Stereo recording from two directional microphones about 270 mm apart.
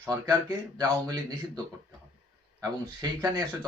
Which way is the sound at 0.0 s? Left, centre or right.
Centre.